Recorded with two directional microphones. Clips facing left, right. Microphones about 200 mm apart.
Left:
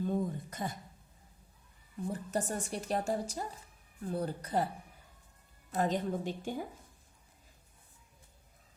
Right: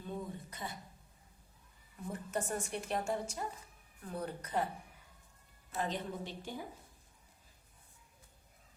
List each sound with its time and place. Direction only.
0.0 s a sound: 45° left (ahead or behind)
2.0 s a woman's voice: 35° left (ahead or behind)
5.7 s a woman's voice: 45° left (ahead or behind)